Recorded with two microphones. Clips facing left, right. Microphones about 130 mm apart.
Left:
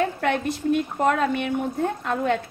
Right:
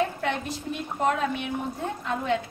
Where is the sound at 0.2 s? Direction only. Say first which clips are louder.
Left 6 dB; 60° left (ahead or behind).